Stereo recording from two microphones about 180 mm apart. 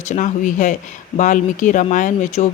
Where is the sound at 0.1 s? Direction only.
45° left (ahead or behind).